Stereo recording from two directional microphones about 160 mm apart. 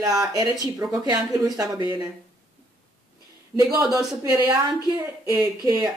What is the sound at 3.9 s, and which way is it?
Speech, 25° right (ahead or behind).